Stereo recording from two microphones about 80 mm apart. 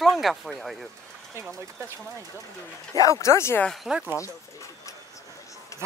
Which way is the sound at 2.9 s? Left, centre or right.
Left.